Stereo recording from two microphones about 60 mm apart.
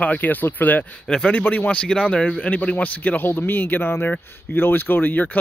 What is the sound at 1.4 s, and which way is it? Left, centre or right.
A man's voice, left.